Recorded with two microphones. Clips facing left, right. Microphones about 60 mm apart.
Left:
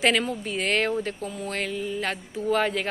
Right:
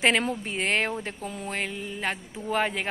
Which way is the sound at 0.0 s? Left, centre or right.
Right.